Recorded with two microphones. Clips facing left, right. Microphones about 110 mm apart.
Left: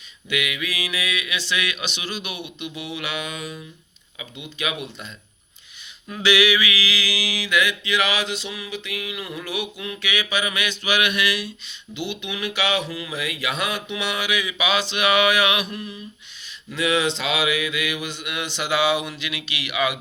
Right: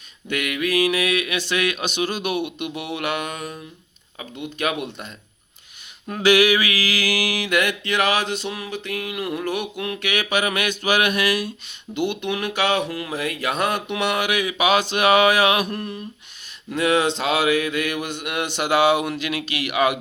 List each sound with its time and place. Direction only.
0.3 s mantra: 50° right (ahead or behind)